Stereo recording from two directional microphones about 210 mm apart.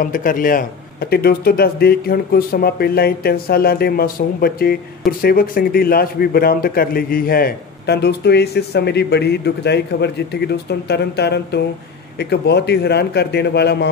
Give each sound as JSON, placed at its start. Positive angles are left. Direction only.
{"t": 0.0, "sound": "a man's voice", "side_deg": 40}